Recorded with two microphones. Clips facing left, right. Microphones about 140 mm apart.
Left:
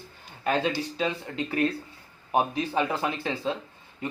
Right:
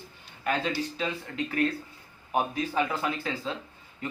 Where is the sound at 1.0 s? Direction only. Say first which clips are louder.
Left 3 dB; 25° left (ahead or behind).